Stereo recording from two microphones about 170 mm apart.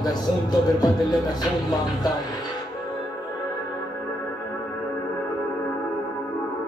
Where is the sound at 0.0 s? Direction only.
25° left (ahead or behind).